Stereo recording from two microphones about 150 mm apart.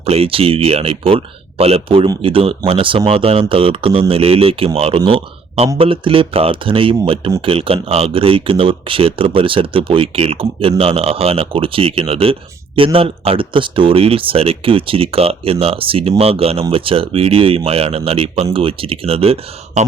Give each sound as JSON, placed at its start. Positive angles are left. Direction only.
{"t": 0.0, "sound": "speech", "side_deg": -40}